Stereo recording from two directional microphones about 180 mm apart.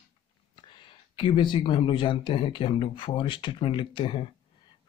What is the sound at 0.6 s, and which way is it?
Speech, 25° left (ahead or behind).